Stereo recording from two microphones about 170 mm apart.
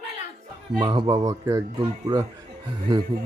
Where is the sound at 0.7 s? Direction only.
30° right (ahead or behind).